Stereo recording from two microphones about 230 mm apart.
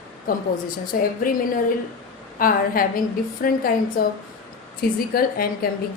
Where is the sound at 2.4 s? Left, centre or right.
Left.